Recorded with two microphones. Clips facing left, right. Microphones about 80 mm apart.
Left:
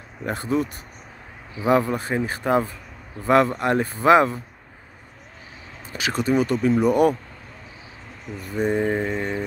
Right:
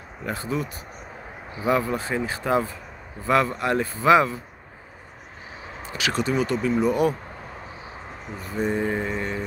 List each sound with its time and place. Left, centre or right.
0.2 s speech: left
1.7 s speech: left
5.9 s speech: left
8.5 s music: left